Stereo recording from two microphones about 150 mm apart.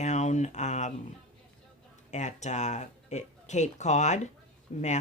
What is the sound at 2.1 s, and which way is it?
Speech, 50° left (ahead or behind).